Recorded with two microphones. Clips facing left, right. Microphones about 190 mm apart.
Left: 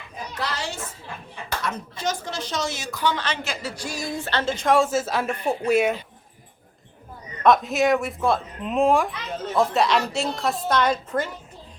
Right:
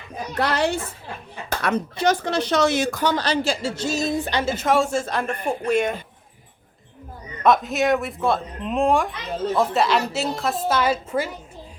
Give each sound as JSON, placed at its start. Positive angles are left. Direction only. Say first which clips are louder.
{"t": 0.3, "sound": "a child's voice", "louder": "right 9 dB", "side_deg": -60}
{"t": 7.4, "sound": "speech", "louder": "even", "side_deg": 0}